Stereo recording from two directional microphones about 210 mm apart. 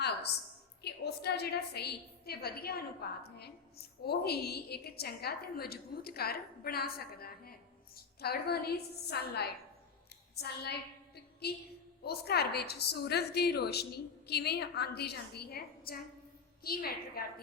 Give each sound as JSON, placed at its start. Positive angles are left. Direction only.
{"t": 0.8, "sound": "a woman's voice", "side_deg": 50}
{"t": 10.3, "sound": "a sound", "side_deg": 50}
{"t": 12.0, "sound": "a woman's voice", "side_deg": 50}